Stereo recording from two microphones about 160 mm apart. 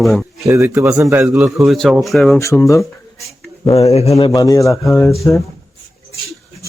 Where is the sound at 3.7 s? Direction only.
40° left (ahead or behind).